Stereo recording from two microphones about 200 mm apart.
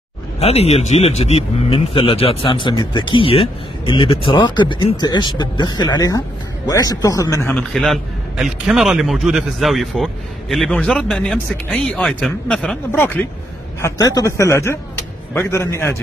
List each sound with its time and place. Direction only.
0.4 s speech: 30° left (ahead or behind); by 7.5 s 15° left (ahead or behind)
7.5 s a man's voice: centre (ahead or behind)